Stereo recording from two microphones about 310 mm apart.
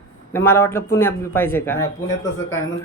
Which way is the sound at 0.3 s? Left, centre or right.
Centre.